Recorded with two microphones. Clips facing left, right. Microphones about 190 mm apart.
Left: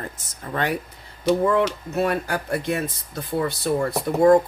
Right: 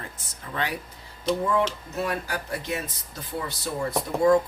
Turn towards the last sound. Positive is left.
turn(degrees=55)  # may be behind; listen again after turning